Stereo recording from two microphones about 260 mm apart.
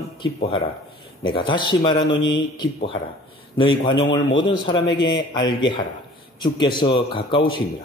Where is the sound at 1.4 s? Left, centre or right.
Centre.